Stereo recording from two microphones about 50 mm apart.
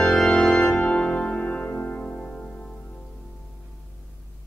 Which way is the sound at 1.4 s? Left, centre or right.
Left.